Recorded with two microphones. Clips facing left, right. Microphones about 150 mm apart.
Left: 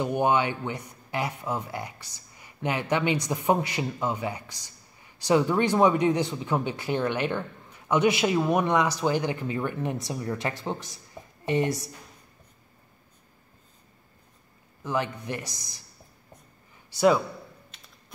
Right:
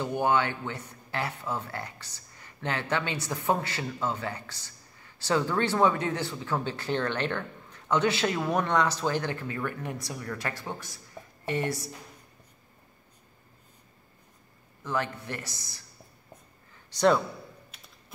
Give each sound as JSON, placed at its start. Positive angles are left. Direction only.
{"t": 0.0, "sound": "speech", "side_deg": 15}
{"t": 14.8, "sound": "speech", "side_deg": 15}
{"t": 16.9, "sound": "a man's voice", "side_deg": 10}